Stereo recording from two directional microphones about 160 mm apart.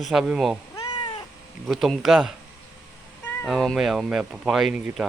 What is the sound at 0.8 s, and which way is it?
Cat, 30° left (ahead or behind).